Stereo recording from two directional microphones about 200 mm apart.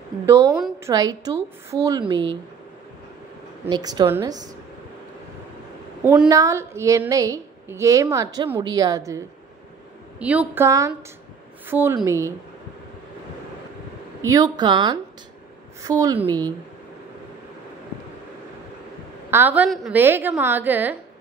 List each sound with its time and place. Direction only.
0.3 s a woman's voice: 15° right (ahead or behind)
3.6 s speech: 20° right (ahead or behind)
6.0 s a woman's voice: 20° right (ahead or behind)
10.1 s a woman's voice: 5° right (ahead or behind)
14.2 s a woman's voice: 20° right (ahead or behind)
19.3 s a woman's voice: 10° right (ahead or behind)